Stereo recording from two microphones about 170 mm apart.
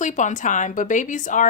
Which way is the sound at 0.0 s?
45° left (ahead or behind).